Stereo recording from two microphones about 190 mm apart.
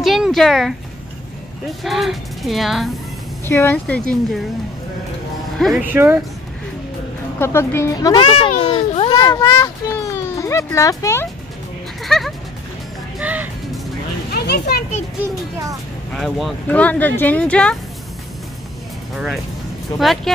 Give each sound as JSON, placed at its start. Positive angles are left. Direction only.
{"t": 0.0, "sound": "speech", "side_deg": 0}
{"t": 1.8, "sound": "speech", "side_deg": 0}
{"t": 3.4, "sound": "speech", "side_deg": 10}
{"t": 5.6, "sound": "speech", "side_deg": 0}
{"t": 7.3, "sound": "a child's voice", "side_deg": 15}
{"t": 12.0, "sound": "music", "side_deg": 0}
{"t": 13.2, "sound": "speech", "side_deg": -10}
{"t": 14.3, "sound": "children playing", "side_deg": 55}
{"t": 16.1, "sound": "speech", "side_deg": 0}
{"t": 19.1, "sound": "speech", "side_deg": 0}